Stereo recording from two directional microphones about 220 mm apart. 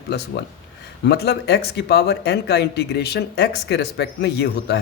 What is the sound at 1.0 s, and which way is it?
Speech, 45° left (ahead or behind).